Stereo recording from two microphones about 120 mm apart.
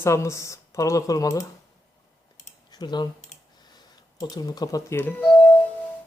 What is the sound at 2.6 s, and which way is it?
Typing, 35° left (ahead or behind).